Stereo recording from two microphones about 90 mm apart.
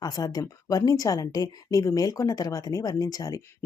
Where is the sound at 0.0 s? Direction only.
45° left (ahead or behind).